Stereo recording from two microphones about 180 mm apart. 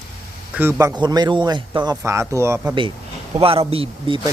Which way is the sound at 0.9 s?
25° right (ahead or behind).